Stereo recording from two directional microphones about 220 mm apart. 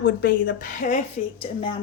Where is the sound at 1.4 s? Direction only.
25° left (ahead or behind).